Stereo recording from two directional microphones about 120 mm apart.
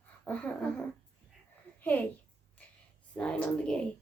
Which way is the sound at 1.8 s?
15° left (ahead or behind).